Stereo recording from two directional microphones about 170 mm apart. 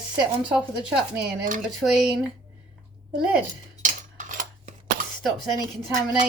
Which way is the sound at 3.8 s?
50° right (ahead or behind).